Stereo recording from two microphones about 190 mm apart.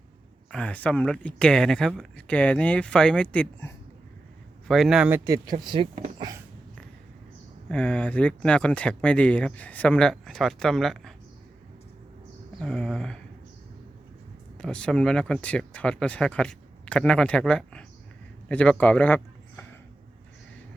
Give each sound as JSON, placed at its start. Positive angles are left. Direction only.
{"t": 0.5, "sound": "speech", "side_deg": 5}
{"t": 4.7, "sound": "speech", "side_deg": 0}
{"t": 6.1, "sound": "a sound", "side_deg": -20}
{"t": 7.7, "sound": "speech", "side_deg": 5}
{"t": 12.5, "sound": "speech", "side_deg": 5}
{"t": 14.6, "sound": "a man's voice", "side_deg": 5}